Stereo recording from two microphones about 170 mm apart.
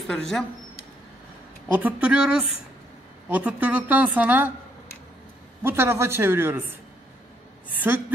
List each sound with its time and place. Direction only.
0.0 s speech: centre (ahead or behind)
1.7 s a woman's voice: 10° right (ahead or behind)
5.6 s a woman's voice: 15° right (ahead or behind)